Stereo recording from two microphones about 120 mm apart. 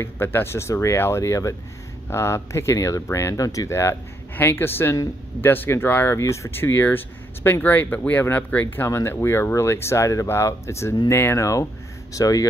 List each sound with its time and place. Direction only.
0.0 s speech: 20° left (ahead or behind)